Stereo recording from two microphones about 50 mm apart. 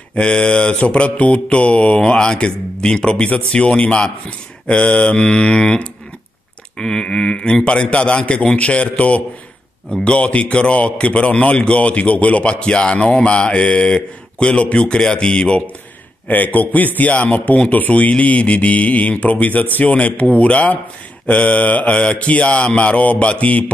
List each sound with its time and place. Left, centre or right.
0.1 s a man's voice: left
16.3 s a man's voice: left